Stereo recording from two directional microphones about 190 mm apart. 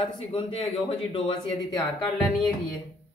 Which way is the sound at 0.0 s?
30° left (ahead or behind).